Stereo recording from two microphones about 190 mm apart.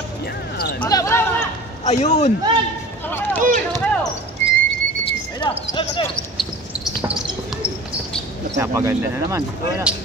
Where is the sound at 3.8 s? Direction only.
5° left (ahead or behind).